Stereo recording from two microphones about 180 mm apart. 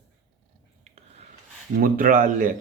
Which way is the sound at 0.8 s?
35° right (ahead or behind).